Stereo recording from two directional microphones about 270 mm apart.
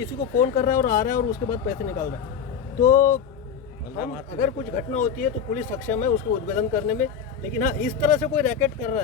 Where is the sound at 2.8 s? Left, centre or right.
Left.